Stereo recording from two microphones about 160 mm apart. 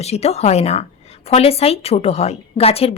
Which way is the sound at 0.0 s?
40° left (ahead or behind).